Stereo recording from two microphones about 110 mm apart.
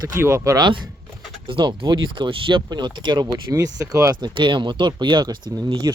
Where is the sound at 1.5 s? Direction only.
45° right (ahead or behind); by 4.1 s 30° right (ahead or behind).